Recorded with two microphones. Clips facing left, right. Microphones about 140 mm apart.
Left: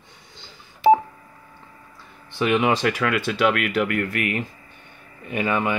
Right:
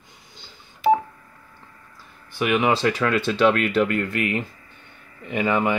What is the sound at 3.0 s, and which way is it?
Speech, 30° right (ahead or behind).